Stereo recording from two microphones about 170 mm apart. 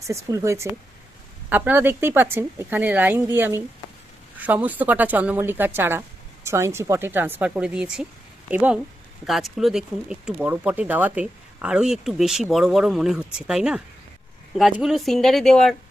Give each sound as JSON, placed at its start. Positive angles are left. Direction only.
{"t": 0.1, "sound": "a woman's voice", "side_deg": -20}